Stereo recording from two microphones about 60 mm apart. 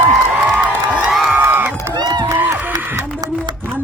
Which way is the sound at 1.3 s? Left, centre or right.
Right.